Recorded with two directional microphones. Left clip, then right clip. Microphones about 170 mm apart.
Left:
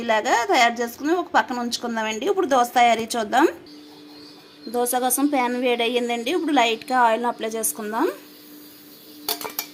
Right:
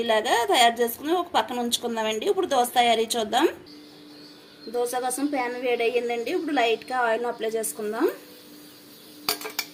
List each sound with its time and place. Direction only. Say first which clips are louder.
0.0 s a woman's voice: left 2 dB; 40° left (ahead or behind)
4.7 s a woman's voice: left 4 dB; 55° left (ahead or behind)